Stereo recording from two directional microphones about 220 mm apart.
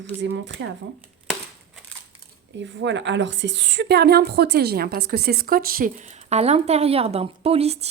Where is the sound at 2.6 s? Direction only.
55° right (ahead or behind).